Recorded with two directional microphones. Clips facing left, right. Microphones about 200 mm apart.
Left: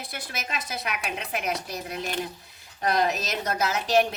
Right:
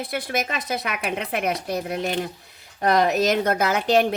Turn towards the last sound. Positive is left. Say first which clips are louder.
# right 4 dB
turn(degrees=-55)  # may be behind; listen again after turning